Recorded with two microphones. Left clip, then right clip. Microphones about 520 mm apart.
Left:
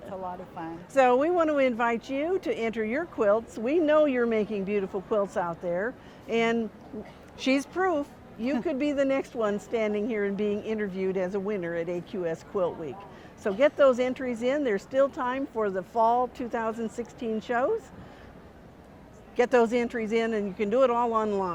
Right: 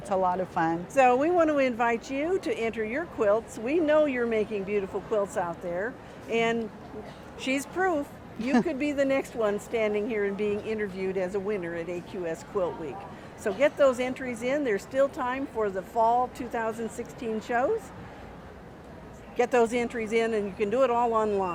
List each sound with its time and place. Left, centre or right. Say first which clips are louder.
0.1 s a woman's voice: right 12 dB; right
0.9 s a woman's voice: even; left
19.4 s speech: left 1 dB; left